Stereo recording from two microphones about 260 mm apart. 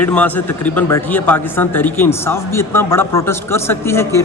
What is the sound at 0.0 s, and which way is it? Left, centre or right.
A man's voice, centre.